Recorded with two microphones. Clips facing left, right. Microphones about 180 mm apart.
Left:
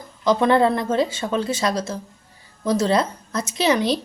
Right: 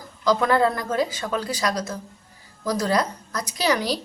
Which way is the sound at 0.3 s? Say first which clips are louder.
Left 3 dB; 25° left (ahead or behind).